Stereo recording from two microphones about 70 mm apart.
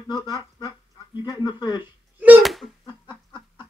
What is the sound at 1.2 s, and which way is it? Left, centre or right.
Speech, left.